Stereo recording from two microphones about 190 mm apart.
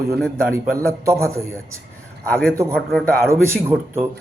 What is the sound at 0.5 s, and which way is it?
Speech, 15° right (ahead or behind).